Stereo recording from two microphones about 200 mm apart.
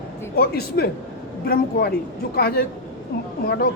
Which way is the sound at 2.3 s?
50° left (ahead or behind).